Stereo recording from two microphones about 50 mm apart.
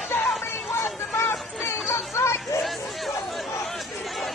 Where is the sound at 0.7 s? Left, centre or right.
Left.